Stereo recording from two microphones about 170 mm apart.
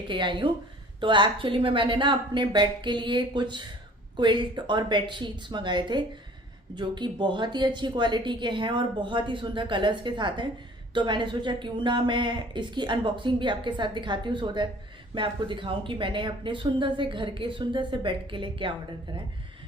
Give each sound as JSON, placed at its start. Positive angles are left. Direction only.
{"t": 0.1, "sound": "a woman's voice", "side_deg": -30}